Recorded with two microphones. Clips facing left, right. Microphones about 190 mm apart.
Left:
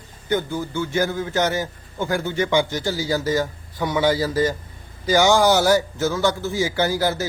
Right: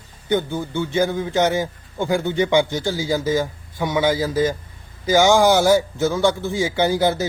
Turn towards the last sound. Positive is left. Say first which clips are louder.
# right 3 dB
turn(degrees=-20)  # may be behind; listen again after turning